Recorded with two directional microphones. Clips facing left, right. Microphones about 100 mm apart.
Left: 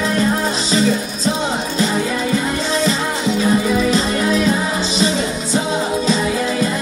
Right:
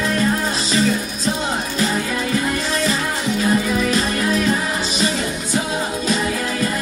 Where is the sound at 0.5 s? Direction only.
25° left (ahead or behind).